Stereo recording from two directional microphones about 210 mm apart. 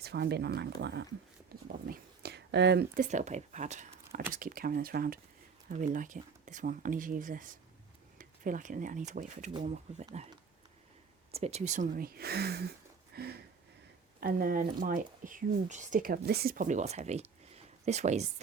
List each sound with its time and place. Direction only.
0.0 s speech: 50° right (ahead or behind); by 9.5 s 35° right (ahead or behind)
9.5 s speech: 20° right (ahead or behind)
11.3 s speech: 30° right (ahead or behind); by 12.7 s 50° right (ahead or behind)
13.1 s a sound: 50° right (ahead or behind)
14.2 s speech: 40° right (ahead or behind)